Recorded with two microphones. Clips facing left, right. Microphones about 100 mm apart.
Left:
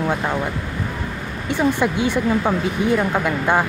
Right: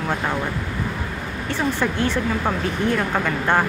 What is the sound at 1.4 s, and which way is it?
Speech, 15° left (ahead or behind).